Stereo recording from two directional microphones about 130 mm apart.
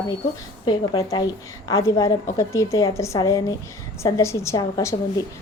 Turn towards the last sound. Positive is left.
turn(degrees=25)  # may be behind; listen again after turning